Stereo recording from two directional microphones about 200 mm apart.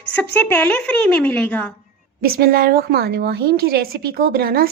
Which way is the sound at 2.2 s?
50° right (ahead or behind).